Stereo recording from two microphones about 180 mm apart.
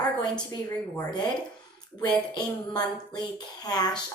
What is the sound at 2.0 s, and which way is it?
Speech, 25° left (ahead or behind).